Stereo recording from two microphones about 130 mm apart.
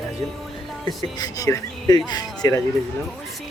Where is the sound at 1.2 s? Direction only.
25° left (ahead or behind).